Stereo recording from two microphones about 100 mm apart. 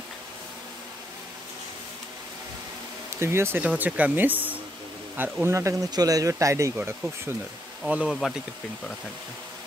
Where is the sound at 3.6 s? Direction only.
15° right (ahead or behind).